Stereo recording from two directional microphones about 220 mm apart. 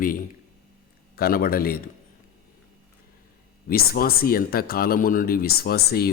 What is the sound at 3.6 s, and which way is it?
Speech, 45° left (ahead or behind).